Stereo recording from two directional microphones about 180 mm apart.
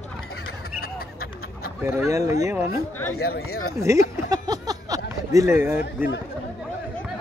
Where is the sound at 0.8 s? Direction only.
55° left (ahead or behind).